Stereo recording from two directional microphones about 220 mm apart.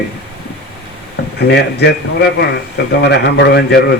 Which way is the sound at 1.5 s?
50° left (ahead or behind).